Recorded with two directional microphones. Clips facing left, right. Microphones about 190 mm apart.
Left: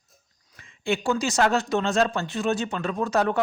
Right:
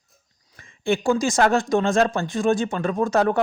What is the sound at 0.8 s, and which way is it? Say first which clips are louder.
Speech: right 4 dB; 50° right (ahead or behind).